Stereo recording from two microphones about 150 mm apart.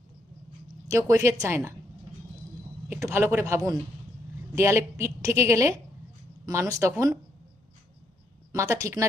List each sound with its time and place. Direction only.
0.9 s a woman's voice: 20° right (ahead or behind)
2.9 s a woman's voice: 15° right (ahead or behind)
8.5 s a woman's voice: 20° right (ahead or behind)